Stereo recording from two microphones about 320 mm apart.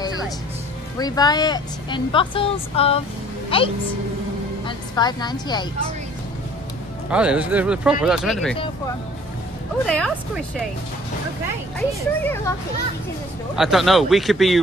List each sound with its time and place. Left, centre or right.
0.9 s a woman's voice: centre
7.1 s speech: centre
9.8 s speech: centre
12.2 s a woman's voice: centre
13.6 s speech: centre